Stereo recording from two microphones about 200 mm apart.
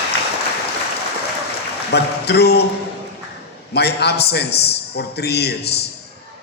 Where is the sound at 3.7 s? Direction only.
55° left (ahead or behind).